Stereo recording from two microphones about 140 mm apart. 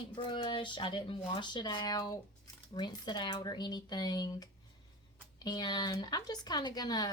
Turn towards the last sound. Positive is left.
turn(degrees=30)  # may be behind; listen again after turning